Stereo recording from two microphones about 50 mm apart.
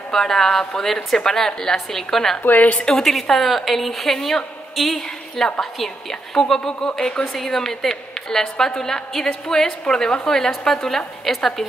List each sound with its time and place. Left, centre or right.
0.1 s a woman's voice: centre
2.4 s a woman's voice: left
2.8 s a woman's voice: centre
3.1 s a woman's voice: centre